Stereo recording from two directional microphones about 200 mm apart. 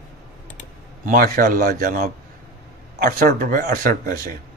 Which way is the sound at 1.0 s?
45° right (ahead or behind).